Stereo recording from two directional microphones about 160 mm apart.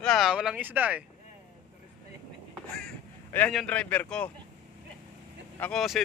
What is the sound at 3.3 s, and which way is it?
Speech, 10° left (ahead or behind).